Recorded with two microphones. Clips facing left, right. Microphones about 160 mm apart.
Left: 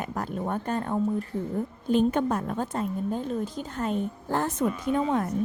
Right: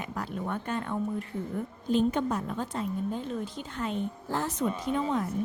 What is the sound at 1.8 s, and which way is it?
A woman's voice, 55° left (ahead or behind).